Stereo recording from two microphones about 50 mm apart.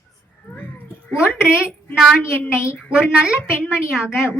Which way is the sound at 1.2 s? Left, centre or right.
Centre.